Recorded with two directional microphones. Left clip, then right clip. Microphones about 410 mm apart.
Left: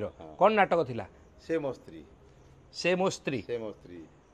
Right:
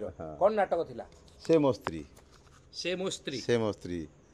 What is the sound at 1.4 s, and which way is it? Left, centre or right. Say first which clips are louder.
Speech: right 7 dB; right.